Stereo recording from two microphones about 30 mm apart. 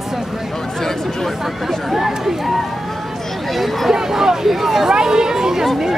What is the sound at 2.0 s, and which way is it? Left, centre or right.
Speech, centre.